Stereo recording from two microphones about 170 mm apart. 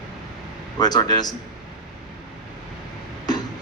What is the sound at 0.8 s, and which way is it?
Speech, 25° left (ahead or behind).